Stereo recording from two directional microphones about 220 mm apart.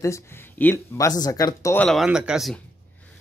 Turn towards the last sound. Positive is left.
turn(degrees=5)  # may be behind; listen again after turning